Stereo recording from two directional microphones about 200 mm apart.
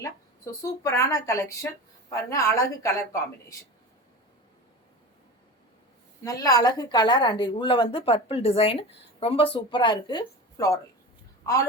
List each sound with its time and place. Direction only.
0.6 s a woman's voice: 15° left (ahead or behind)
6.2 s a woman's voice: 20° left (ahead or behind)